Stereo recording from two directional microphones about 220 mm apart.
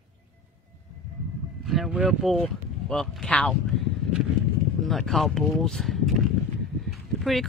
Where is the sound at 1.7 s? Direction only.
Centre (ahead or behind).